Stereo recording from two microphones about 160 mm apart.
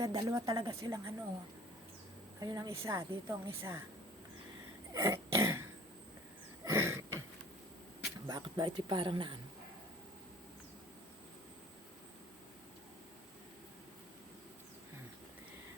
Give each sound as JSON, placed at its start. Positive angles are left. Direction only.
{"t": 0.0, "sound": "a woman's voice", "side_deg": -20}
{"t": 2.4, "sound": "a woman's voice", "side_deg": -20}
{"t": 4.9, "sound": "cough", "side_deg": -15}
{"t": 6.7, "sound": "a sound", "side_deg": -15}
{"t": 8.3, "sound": "a woman's voice", "side_deg": -25}